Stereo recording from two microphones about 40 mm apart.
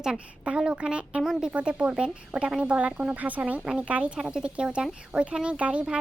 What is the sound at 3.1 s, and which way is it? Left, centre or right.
Speech, right.